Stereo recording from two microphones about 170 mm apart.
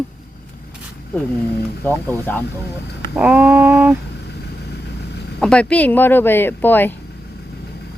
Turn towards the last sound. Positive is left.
turn(degrees=10)  # may be behind; listen again after turning